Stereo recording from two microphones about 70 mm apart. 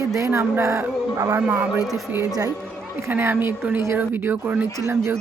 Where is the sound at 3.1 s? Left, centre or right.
Right.